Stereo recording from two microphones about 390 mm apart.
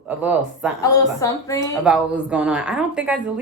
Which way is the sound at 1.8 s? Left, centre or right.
Centre.